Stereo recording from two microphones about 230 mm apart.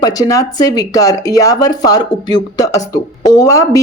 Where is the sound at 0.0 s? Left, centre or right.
Centre.